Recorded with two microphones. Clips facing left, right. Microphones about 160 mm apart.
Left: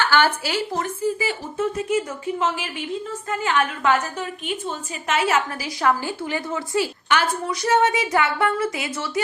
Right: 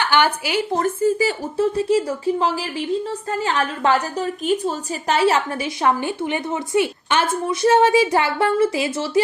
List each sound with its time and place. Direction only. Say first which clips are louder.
0.0 s speech: right 1 dB; 15° right (ahead or behind)
0.8 s a woman's voice: right 6 dB; 40° right (ahead or behind)